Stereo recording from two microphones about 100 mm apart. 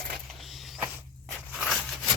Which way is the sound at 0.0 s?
Centre (ahead or behind).